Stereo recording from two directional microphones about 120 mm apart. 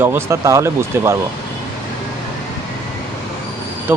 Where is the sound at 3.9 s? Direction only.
15° right (ahead or behind).